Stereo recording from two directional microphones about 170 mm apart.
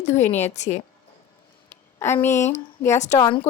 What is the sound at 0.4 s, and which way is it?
Speech, 40° left (ahead or behind).